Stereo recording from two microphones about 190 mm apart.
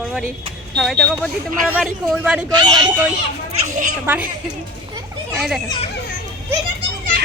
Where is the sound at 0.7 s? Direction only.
Centre (ahead or behind).